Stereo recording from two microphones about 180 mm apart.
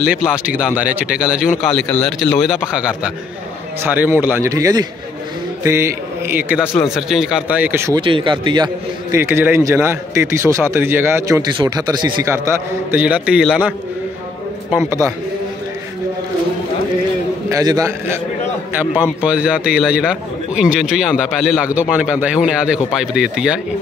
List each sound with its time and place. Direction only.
0.0 s a man's voice: centre (ahead or behind)
8.0 s speech: 30° right (ahead or behind)
9.1 s a man's voice: 15° right (ahead or behind)
17.5 s a man's voice: 20° right (ahead or behind)